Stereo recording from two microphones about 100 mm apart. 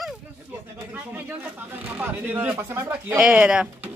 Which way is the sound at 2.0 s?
20° right (ahead or behind).